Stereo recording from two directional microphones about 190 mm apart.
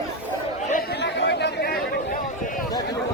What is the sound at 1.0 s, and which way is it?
Chatter, 65° left (ahead or behind).